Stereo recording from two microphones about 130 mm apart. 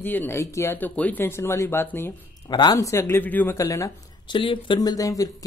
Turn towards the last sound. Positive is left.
turn(degrees=25)  # may be behind; listen again after turning